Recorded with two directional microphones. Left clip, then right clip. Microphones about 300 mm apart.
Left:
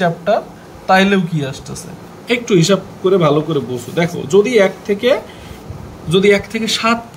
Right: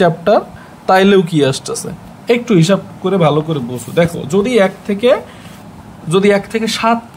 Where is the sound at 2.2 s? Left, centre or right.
Centre.